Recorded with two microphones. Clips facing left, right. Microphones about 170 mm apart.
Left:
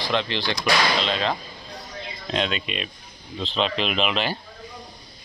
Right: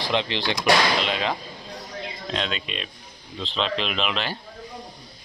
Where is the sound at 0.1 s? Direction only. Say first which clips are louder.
Even; 20° right (ahead or behind).